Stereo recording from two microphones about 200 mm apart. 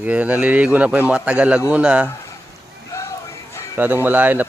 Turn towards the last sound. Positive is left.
turn(degrees=-10)  # may be behind; listen again after turning